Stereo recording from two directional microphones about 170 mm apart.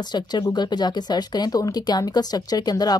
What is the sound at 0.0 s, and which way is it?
Speech, 25° left (ahead or behind).